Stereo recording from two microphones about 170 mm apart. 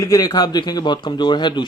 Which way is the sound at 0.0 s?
20° left (ahead or behind).